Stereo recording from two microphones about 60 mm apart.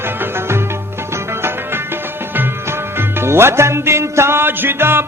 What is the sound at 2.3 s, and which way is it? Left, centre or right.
Music, right.